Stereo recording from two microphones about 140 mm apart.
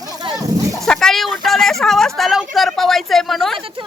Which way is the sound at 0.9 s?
5° left (ahead or behind).